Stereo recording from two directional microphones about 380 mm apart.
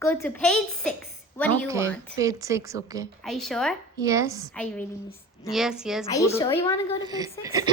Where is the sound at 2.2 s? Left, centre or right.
Centre.